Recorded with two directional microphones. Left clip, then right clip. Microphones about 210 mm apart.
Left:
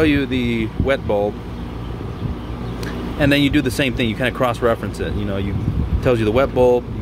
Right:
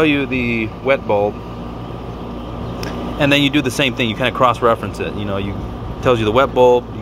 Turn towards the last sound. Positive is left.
turn(degrees=20)  # may be behind; listen again after turning